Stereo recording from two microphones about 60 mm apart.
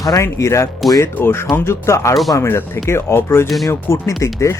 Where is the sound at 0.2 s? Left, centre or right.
Left.